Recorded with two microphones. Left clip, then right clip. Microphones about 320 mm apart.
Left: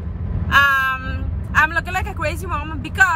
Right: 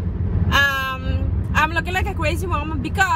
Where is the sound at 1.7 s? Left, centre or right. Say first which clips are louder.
Left 1 dB; left.